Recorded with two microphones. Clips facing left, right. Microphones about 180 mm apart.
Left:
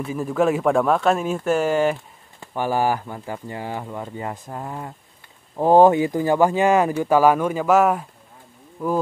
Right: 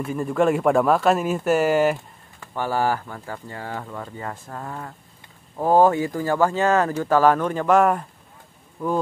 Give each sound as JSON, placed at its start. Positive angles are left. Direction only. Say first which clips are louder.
{"t": 0.0, "sound": "speech", "louder": "even", "side_deg": 0}
{"t": 2.4, "sound": "speech", "louder": "left 2 dB", "side_deg": 15}